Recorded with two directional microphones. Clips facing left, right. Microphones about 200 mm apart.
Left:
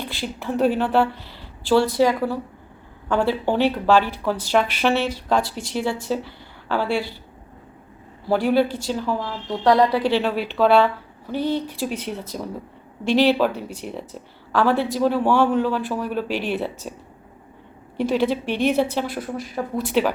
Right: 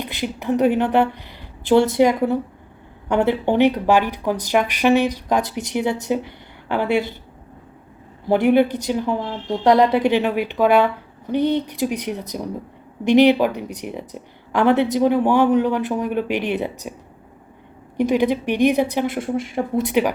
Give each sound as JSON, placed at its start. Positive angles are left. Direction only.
{"t": 0.0, "sound": "a woman's voice", "side_deg": -15}
{"t": 8.3, "sound": "a woman's voice", "side_deg": -20}
{"t": 17.9, "sound": "a woman's voice", "side_deg": -15}